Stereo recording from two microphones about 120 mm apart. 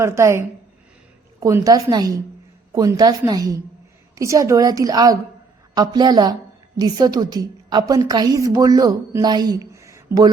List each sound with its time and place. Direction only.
0.0 s a woman's voice: 25° right (ahead or behind)